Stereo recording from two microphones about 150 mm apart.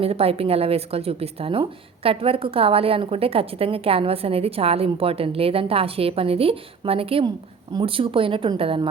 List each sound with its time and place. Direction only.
0.0 s a woman's voice: 40° right (ahead or behind)